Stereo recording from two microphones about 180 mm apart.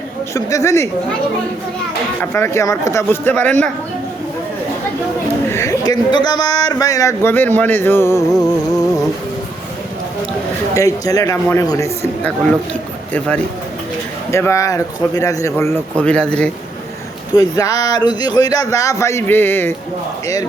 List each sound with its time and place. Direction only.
0.3 s a man's voice: 15° left (ahead or behind)
2.3 s a man's voice: 15° left (ahead or behind)
5.5 s a man's voice: 15° left (ahead or behind)
8.3 s a sound: centre (ahead or behind)
10.8 s speech: 20° left (ahead or behind)
13.1 s a sound: 5° left (ahead or behind)
14.3 s a man's voice: 15° left (ahead or behind)
17.3 s speech: 20° left (ahead or behind)